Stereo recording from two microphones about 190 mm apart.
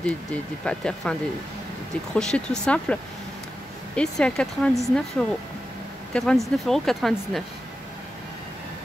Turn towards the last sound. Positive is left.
turn(degrees=0)  # may be behind; listen again after turning